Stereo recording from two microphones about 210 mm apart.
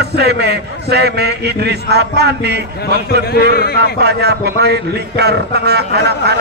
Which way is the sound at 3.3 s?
50° left (ahead or behind).